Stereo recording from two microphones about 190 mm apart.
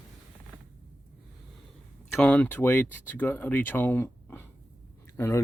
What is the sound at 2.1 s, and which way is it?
Speech, 5° left (ahead or behind).